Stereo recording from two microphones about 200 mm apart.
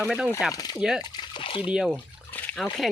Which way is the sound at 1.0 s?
20° left (ahead or behind).